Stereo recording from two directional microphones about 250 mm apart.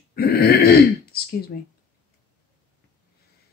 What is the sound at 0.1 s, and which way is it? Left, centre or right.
Throat clearing, left.